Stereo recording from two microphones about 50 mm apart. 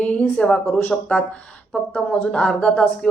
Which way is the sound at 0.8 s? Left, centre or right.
Left.